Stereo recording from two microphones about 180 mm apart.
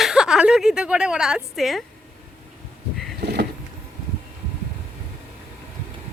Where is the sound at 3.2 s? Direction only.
65° right (ahead or behind).